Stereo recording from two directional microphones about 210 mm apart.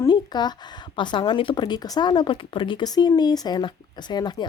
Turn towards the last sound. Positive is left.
turn(degrees=20)  # may be behind; listen again after turning